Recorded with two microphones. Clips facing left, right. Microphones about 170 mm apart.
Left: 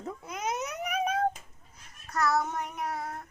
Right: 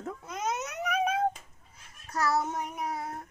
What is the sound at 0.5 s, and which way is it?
Vehicle, centre (ahead or behind).